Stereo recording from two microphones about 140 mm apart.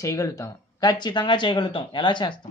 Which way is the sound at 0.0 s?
25° left (ahead or behind).